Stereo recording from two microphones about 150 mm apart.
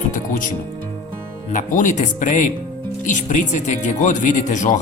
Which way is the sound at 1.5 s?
60° left (ahead or behind).